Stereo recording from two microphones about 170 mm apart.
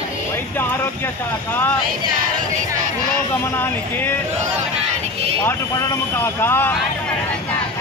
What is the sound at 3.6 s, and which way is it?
Speech, 10° left (ahead or behind).